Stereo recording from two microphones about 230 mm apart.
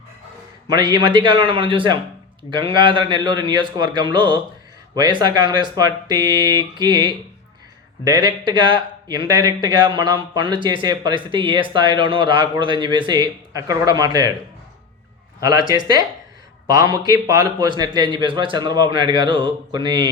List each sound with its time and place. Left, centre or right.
0.7 s a man's voice: centre
15.7 s a man's voice: centre